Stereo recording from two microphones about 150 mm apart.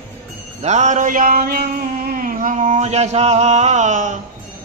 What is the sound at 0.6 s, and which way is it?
Mantra, 50° right (ahead or behind).